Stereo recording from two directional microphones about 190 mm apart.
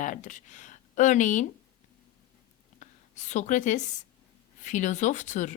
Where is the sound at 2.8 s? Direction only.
40° left (ahead or behind).